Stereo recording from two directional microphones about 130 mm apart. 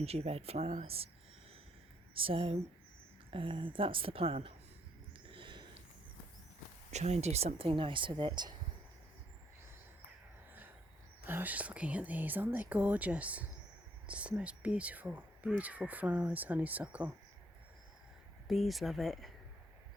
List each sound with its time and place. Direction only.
0.0 s a woman's voice: 50° right (ahead or behind)
2.1 s a woman's voice: 45° right (ahead or behind)
5.3 s a sound: 40° right (ahead or behind)
6.9 s speech: 55° right (ahead or behind); by 8.5 s 35° right (ahead or behind)
11.3 s speech: 15° right (ahead or behind)
18.4 s speech: centre (ahead or behind)